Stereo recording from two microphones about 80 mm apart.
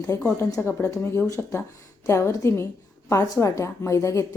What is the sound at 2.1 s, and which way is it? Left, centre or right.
A woman's voice, left.